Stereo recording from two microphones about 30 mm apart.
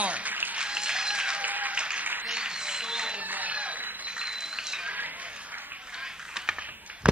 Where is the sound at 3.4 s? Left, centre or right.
Right.